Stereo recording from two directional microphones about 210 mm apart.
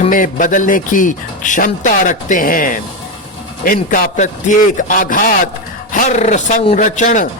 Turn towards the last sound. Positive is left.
turn(degrees=35)  # may be behind; listen again after turning